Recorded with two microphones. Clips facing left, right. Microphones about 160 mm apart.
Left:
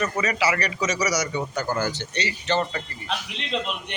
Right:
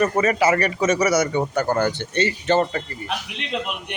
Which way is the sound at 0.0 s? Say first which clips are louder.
Right 6 dB; 50° right (ahead or behind).